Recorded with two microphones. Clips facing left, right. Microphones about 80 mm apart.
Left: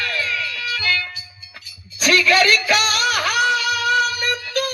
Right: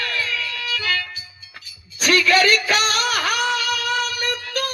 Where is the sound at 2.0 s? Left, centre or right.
Right.